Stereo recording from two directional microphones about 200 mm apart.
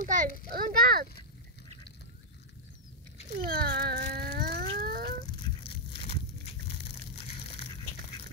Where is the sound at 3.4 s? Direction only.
50° right (ahead or behind).